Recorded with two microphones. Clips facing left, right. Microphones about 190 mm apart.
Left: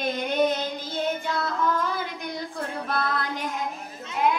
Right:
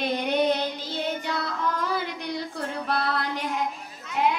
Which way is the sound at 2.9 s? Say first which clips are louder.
Right 1 dB; 45° left (ahead or behind).